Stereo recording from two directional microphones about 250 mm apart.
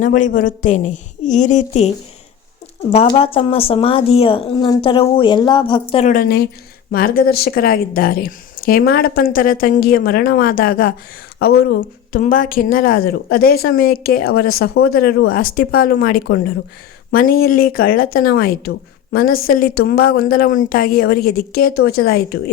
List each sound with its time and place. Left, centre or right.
0.0 s a woman's voice: left
2.9 s a woman's voice: left